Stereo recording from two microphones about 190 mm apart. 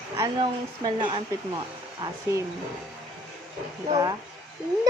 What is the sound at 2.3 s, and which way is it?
Speech, 15° right (ahead or behind).